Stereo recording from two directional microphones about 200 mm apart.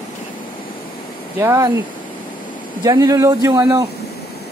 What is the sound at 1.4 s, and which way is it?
Speech, 15° right (ahead or behind).